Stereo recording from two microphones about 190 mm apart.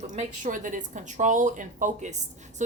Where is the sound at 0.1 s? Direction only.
40° right (ahead or behind).